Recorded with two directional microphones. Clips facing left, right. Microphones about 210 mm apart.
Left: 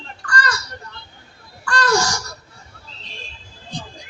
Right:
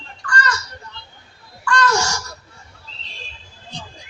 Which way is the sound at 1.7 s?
35° left (ahead or behind).